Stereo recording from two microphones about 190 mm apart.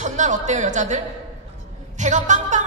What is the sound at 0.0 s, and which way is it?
A woman's voice, 40° right (ahead or behind).